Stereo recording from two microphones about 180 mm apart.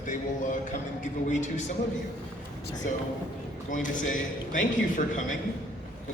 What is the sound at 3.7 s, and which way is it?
A man's voice, 45° left (ahead or behind).